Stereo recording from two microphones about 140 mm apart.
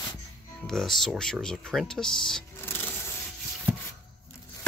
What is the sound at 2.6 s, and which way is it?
Rub, 15° left (ahead or behind).